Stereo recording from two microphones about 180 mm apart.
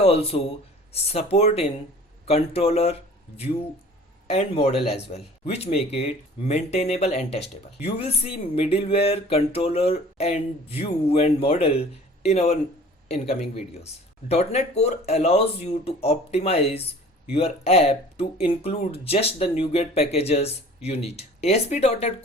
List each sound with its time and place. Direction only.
0.0 s speech: 35° left (ahead or behind)